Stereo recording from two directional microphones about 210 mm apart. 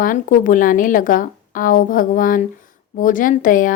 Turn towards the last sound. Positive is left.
turn(degrees=40)  # may be behind; listen again after turning